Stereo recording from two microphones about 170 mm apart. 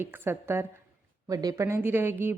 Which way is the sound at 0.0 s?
15° right (ahead or behind).